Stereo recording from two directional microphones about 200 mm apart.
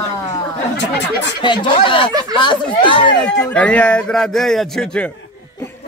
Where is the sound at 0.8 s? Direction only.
60° left (ahead or behind).